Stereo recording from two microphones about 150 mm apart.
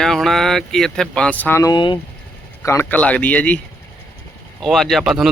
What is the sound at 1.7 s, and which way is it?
Speech, 30° left (ahead or behind).